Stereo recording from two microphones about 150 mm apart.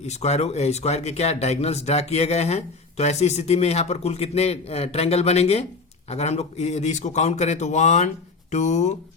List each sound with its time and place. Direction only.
0.0 s speech: 45° left (ahead or behind)